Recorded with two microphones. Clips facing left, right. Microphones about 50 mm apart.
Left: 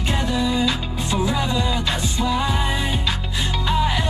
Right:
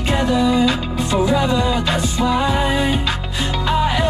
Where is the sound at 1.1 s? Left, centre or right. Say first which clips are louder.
Right 5 dB; right.